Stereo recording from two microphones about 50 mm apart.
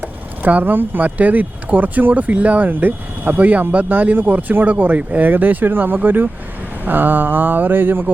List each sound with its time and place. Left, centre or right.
0.4 s speech: right